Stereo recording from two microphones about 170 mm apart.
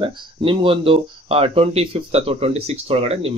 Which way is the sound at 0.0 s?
30° right (ahead or behind).